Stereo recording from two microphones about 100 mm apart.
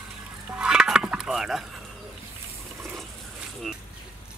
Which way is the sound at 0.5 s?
10° right (ahead or behind).